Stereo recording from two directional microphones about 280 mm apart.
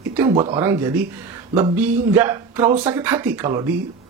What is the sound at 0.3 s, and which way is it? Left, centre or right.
Speech, right.